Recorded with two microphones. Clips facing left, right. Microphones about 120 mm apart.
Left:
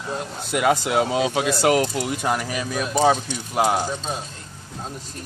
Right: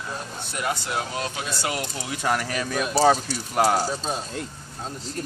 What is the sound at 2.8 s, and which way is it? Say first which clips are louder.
Speech: even; 5° right (ahead or behind).